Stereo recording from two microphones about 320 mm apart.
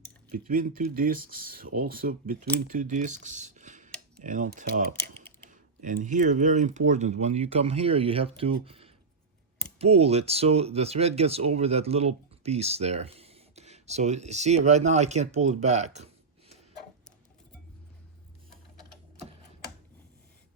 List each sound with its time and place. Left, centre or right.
0.3 s speech: right